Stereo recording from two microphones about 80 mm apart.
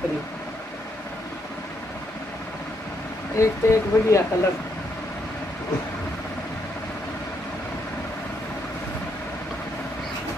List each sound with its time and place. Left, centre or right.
3.3 s speech: left